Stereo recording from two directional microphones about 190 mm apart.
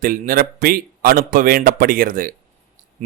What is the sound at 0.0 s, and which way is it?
A man's voice, 50° right (ahead or behind).